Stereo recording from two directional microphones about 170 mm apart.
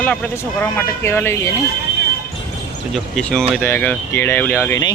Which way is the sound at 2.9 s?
5° left (ahead or behind).